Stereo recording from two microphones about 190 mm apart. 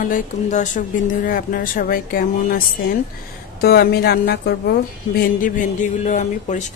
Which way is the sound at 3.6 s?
55° left (ahead or behind).